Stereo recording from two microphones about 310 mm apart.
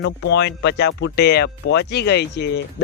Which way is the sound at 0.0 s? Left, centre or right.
Left.